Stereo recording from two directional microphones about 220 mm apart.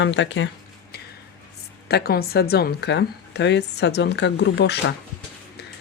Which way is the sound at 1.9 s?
45° left (ahead or behind).